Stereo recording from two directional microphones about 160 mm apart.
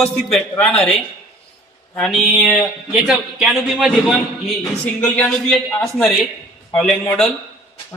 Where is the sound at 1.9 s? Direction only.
Centre (ahead or behind).